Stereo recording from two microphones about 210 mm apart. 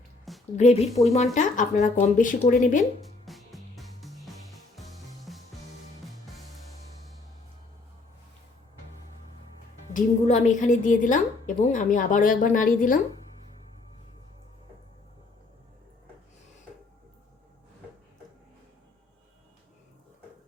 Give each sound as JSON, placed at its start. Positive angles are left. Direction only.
{"t": 0.5, "sound": "speech", "side_deg": 30}
{"t": 3.2, "sound": "music", "side_deg": 0}
{"t": 9.9, "sound": "speech", "side_deg": 35}